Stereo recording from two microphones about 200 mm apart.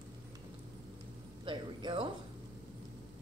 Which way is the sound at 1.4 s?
25° right (ahead or behind).